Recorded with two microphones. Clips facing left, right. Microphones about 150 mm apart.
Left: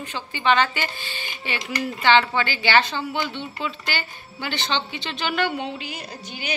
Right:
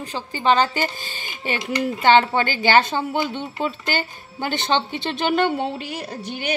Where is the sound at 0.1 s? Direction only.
40° right (ahead or behind).